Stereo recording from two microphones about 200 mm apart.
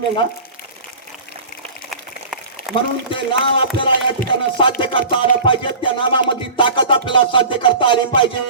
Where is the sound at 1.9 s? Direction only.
Centre (ahead or behind).